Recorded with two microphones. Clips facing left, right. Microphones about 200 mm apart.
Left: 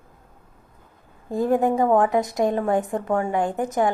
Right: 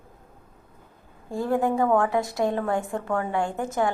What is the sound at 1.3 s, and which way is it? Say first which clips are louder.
A woman's voice: left 4 dB; 20° left (ahead or behind).